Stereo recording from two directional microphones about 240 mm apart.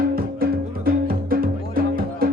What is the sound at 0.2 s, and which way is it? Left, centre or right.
Music, right.